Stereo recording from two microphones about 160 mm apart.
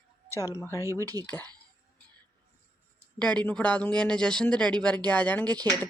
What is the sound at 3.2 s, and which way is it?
Speech, 10° left (ahead or behind).